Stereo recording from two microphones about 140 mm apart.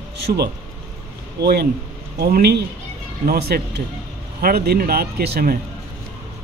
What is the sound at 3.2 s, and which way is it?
Speech, 90° right.